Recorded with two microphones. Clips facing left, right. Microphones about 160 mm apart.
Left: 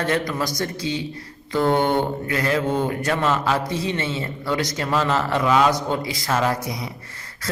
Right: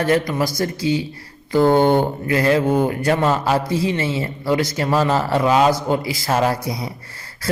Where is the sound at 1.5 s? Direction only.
30° right (ahead or behind).